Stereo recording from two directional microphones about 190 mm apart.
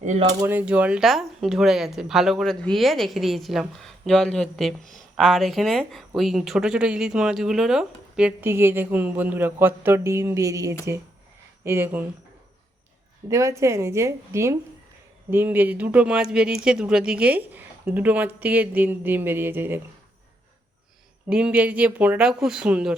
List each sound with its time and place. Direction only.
0.0 s speech: 40° right (ahead or behind)
0.4 s speech: 10° right (ahead or behind)
4.8 s speech: 45° right (ahead or behind)
5.1 s speech: centre (ahead or behind)
13.3 s speech: 15° right (ahead or behind)
21.2 s speech: 5° right (ahead or behind)